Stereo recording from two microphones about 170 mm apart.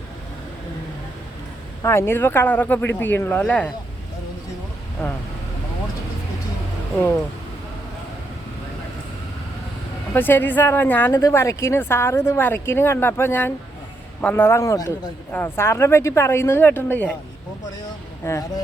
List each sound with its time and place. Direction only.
1.8 s speech: 15° left (ahead or behind)
10.2 s speech: 10° left (ahead or behind)
17.8 s a sound: 20° left (ahead or behind)